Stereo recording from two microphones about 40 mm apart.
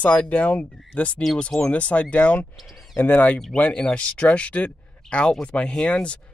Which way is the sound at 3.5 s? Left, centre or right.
Left.